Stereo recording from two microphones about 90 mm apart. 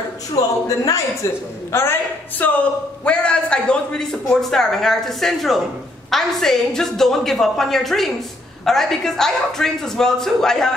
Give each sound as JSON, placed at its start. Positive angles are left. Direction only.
{"t": 0.4, "sound": "a man's voice", "side_deg": 40}
{"t": 1.7, "sound": "a man's voice", "side_deg": 25}